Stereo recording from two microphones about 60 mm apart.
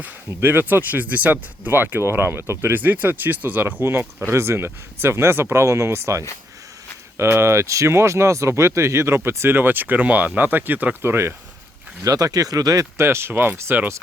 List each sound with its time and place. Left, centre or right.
0.3 s speech: right
4.3 s speech: right
11.0 s speech: right
12.0 s speech: right